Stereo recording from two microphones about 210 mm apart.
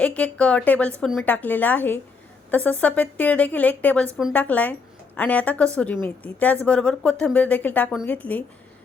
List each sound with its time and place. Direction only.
0.0 s a woman's voice: 5° left (ahead or behind)